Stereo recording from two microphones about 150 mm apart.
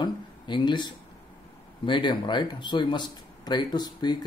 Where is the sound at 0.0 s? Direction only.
30° left (ahead or behind).